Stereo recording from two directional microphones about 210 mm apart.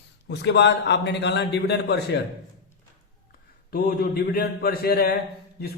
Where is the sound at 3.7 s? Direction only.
45° left (ahead or behind).